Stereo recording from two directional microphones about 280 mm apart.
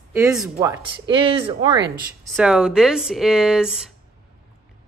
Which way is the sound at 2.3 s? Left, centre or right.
Centre.